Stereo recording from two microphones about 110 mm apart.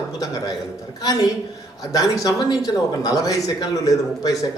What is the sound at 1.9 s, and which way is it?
Speech, 30° left (ahead or behind).